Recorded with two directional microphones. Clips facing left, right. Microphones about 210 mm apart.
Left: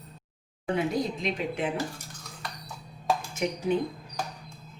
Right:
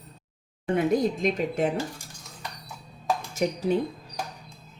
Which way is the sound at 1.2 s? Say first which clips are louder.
Right 5 dB; 45° right (ahead or behind).